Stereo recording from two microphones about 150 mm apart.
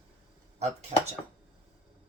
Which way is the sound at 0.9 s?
45° right (ahead or behind).